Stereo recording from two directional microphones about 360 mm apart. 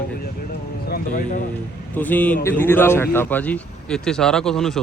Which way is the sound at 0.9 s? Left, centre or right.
Left.